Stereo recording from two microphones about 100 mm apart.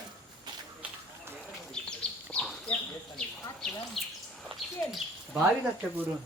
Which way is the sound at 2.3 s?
Centre (ahead or behind).